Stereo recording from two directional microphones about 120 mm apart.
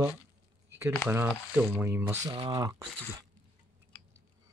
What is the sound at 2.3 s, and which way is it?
Speech, 45° right (ahead or behind).